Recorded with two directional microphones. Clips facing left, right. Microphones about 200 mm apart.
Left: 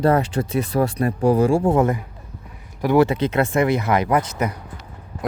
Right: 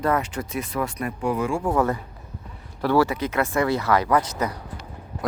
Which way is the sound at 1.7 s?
20° left (ahead or behind).